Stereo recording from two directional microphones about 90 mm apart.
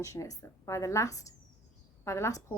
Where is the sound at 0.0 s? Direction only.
40° left (ahead or behind).